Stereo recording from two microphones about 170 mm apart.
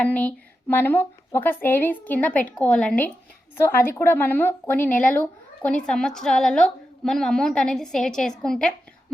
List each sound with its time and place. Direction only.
0.0 s a woman's voice: 10° left (ahead or behind)